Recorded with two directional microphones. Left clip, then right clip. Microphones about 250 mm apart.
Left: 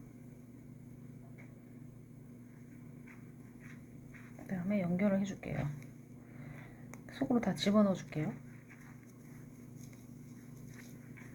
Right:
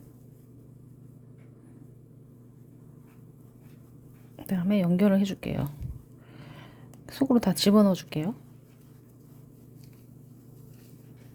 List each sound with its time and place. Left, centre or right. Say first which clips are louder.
4.4 s speech: right 9 dB; right
6.4 s a sound: right 5 dB; right
7.1 s speech: right 9 dB; right